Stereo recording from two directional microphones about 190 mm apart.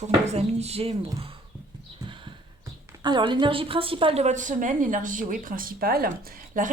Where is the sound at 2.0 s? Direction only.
25° right (ahead or behind).